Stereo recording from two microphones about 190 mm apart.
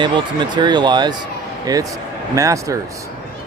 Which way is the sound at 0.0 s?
25° right (ahead or behind).